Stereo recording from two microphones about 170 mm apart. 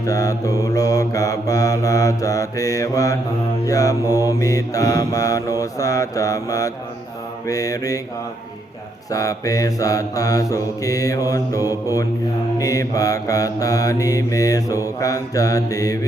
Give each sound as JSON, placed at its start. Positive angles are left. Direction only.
{"t": 0.0, "sound": "mantra", "side_deg": 20}
{"t": 9.1, "sound": "mantra", "side_deg": 20}
{"t": 11.6, "sound": "mantra", "side_deg": -15}
{"t": 12.5, "sound": "mantra", "side_deg": 20}